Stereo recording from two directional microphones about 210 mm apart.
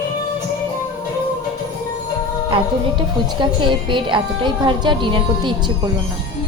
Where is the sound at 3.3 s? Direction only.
20° right (ahead or behind).